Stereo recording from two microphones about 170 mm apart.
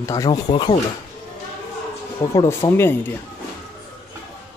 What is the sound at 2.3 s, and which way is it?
Speech, 20° left (ahead or behind).